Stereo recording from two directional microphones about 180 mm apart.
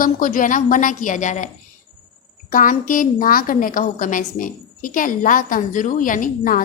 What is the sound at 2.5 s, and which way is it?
A woman's voice, 50° left (ahead or behind).